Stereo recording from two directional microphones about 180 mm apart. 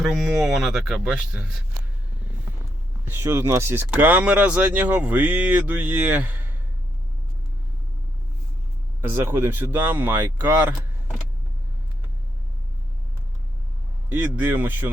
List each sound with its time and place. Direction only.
0.4 s speech: centre (ahead or behind)
3.1 s speech: 15° right (ahead or behind)
9.0 s speech: 10° right (ahead or behind)
14.1 s speech: 10° right (ahead or behind)